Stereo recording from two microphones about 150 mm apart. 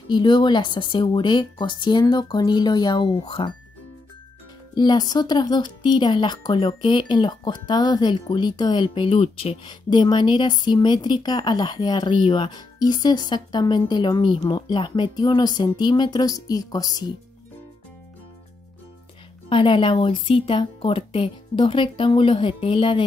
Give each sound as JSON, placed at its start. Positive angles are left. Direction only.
{"t": 0.1, "sound": "speech", "side_deg": 30}
{"t": 4.7, "sound": "speech", "side_deg": 30}
{"t": 19.5, "sound": "speech", "side_deg": 35}